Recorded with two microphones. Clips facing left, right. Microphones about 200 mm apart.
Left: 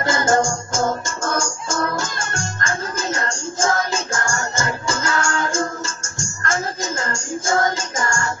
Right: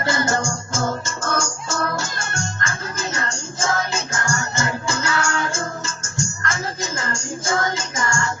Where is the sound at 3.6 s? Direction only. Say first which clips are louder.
Left 2 dB; 45° left (ahead or behind).